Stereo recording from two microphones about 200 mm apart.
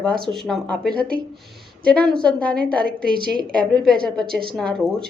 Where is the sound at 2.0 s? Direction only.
5° left (ahead or behind).